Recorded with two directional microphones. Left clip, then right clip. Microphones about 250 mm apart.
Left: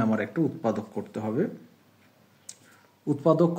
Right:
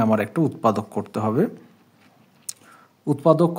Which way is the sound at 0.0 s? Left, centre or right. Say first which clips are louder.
Right 6 dB; right.